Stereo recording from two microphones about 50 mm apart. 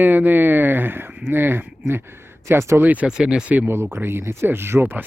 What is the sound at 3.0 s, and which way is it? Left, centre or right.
Speech, centre.